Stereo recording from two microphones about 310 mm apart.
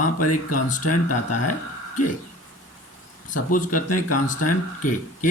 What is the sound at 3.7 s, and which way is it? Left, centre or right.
Speech, left.